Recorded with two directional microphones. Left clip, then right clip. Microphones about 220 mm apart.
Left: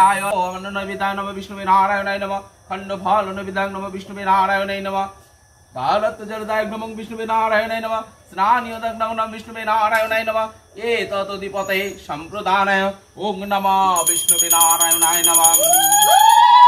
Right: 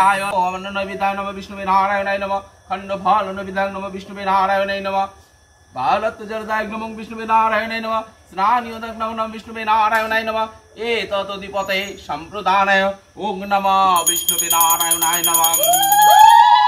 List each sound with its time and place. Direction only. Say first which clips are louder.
0.0 s a man's voice: even; 20° right (ahead or behind)